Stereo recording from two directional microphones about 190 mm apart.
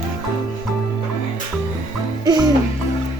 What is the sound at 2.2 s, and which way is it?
Music, 20° right (ahead or behind).